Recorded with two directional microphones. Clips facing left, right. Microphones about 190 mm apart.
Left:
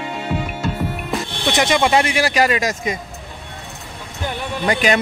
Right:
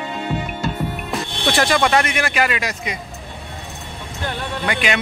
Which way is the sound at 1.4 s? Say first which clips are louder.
Even; 20° left (ahead or behind).